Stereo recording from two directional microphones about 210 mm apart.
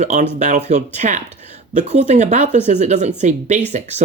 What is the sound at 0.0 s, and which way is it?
Speech, 35° right (ahead or behind).